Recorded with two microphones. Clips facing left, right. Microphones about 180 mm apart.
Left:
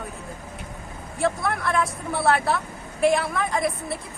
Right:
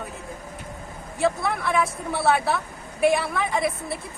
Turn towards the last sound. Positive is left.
turn(degrees=0)  # may be behind; listen again after turning